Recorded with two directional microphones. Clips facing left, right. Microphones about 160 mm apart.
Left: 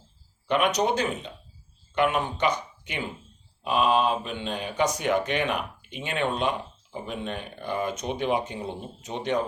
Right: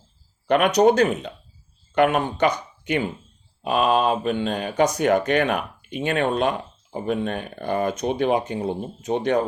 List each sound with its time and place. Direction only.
0.4 s speech: 50° right (ahead or behind)